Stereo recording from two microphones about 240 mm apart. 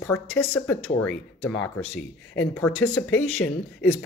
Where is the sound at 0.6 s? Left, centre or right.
Centre.